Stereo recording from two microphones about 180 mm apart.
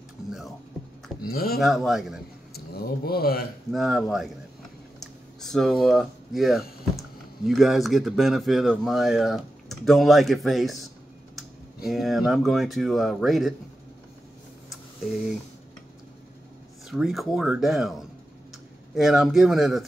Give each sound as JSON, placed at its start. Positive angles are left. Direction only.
{"t": 1.2, "sound": "speech", "side_deg": 55}
{"t": 1.6, "sound": "speech", "side_deg": 0}
{"t": 2.5, "sound": "speech", "side_deg": 60}
{"t": 3.7, "sound": "speech", "side_deg": 0}
{"t": 11.9, "sound": "speech", "side_deg": 0}
{"t": 14.7, "sound": "a sound", "side_deg": 0}
{"t": 16.9, "sound": "speech", "side_deg": 0}